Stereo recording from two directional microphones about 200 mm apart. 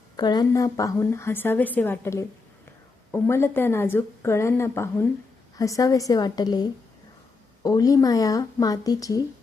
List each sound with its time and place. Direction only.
0.2 s a woman's voice: 20° left (ahead or behind)